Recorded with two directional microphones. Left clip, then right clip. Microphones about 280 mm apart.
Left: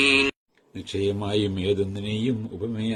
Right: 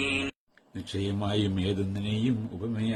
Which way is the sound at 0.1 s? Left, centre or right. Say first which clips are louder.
Left 10 dB; left.